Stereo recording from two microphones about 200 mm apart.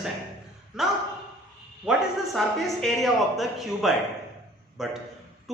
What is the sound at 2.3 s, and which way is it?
A man's voice, centre (ahead or behind).